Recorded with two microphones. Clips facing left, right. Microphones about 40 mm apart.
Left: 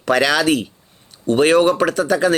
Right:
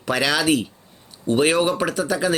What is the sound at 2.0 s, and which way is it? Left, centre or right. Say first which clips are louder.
Speech: left 5 dB; centre.